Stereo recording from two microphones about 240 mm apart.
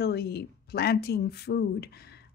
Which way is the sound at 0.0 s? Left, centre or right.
Left.